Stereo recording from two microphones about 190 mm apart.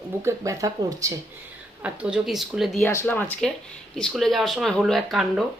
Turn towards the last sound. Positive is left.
turn(degrees=0)  # may be behind; listen again after turning